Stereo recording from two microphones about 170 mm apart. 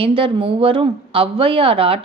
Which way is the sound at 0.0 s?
30° right (ahead or behind).